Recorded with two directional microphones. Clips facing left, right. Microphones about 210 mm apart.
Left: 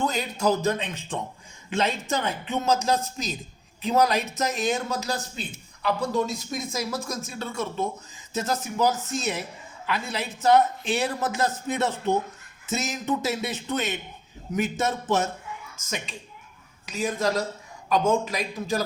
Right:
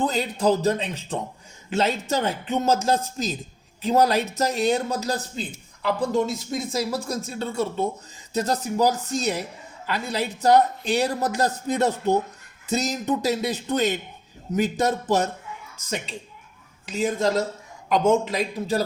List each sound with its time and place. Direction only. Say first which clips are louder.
0.0 s a man's voice: right 3 dB; 30° right (ahead or behind)